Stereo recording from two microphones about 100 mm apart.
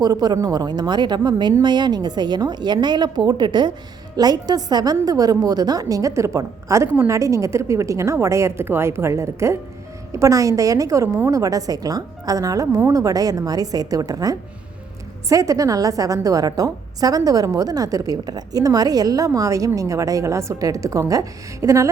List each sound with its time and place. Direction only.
0.0 s a woman's voice: 40° right (ahead or behind)